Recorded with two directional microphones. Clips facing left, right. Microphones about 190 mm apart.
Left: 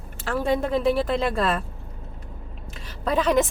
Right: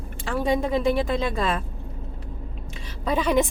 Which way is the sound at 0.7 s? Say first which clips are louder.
Left 1 dB; centre (ahead or behind).